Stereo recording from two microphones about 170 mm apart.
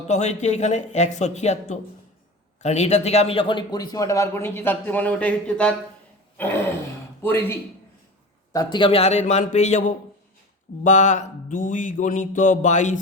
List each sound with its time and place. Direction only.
0.1 s music: 40° left (ahead or behind)
2.6 s a man's voice: 40° left (ahead or behind); by 5.7 s 5° left (ahead or behind)
7.2 s a man's voice: 15° left (ahead or behind)
8.5 s a man's voice: 25° left (ahead or behind); by 9.9 s 45° left (ahead or behind)
10.8 s music: 45° left (ahead or behind)